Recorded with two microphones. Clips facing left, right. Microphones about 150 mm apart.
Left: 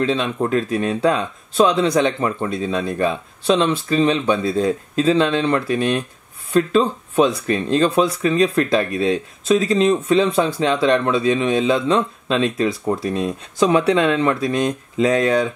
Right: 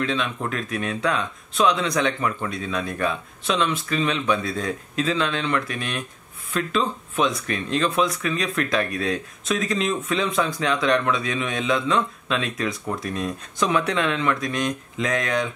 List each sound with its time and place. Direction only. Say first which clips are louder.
0.0 s speech: left 6 dB; 30° left (ahead or behind)